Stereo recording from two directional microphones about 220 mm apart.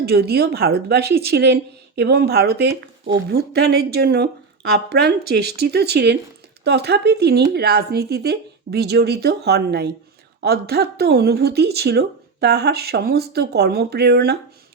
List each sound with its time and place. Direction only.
0.0 s speech: 45° right (ahead or behind)